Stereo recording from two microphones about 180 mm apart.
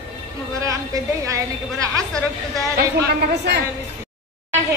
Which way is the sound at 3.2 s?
70° right (ahead or behind).